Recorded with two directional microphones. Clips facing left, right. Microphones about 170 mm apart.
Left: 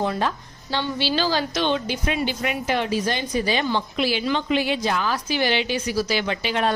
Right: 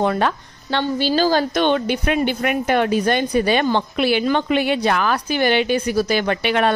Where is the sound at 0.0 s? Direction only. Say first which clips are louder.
Right 5 dB; 65° right (ahead or behind).